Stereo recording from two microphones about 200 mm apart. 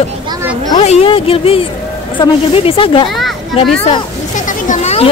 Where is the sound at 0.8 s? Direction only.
30° left (ahead or behind).